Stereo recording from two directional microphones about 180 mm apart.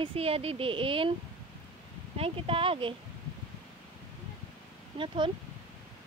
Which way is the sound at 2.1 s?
30° right (ahead or behind).